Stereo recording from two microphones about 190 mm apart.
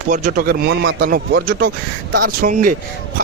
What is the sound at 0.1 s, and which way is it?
A man's voice, 45° right (ahead or behind).